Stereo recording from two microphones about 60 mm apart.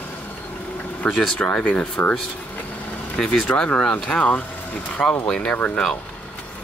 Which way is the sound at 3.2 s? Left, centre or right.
Centre.